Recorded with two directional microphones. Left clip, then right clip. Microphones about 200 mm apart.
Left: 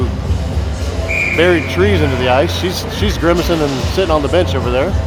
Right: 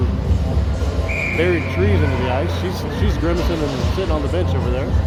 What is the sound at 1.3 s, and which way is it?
Speech, 30° left (ahead or behind).